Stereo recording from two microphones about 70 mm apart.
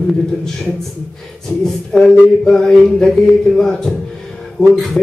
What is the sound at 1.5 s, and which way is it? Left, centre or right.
Speech, left.